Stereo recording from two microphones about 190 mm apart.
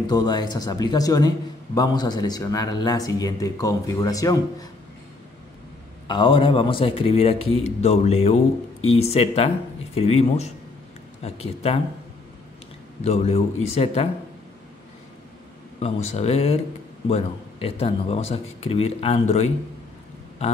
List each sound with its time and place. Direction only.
0.0 s a man's voice: 20° left (ahead or behind)
6.0 s a man's voice: 25° left (ahead or behind)
13.0 s speech: 35° left (ahead or behind)
15.8 s speech: 35° left (ahead or behind)